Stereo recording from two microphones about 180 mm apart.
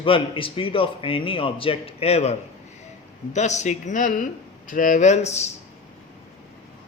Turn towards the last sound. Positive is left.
turn(degrees=40)  # may be behind; listen again after turning